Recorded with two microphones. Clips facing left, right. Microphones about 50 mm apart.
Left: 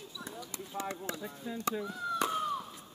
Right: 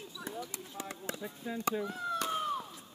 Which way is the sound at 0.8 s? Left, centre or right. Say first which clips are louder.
Left 4 dB; centre.